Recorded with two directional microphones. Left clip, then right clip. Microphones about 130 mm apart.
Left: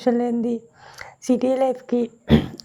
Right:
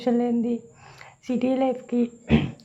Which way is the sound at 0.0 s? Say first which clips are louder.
Left 3 dB; 40° left (ahead or behind).